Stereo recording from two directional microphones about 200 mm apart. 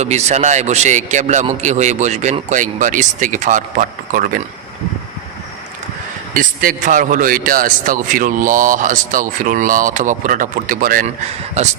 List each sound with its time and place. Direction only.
0.0 s a man's voice: 35° right (ahead or behind)
6.3 s a man's voice: 45° right (ahead or behind)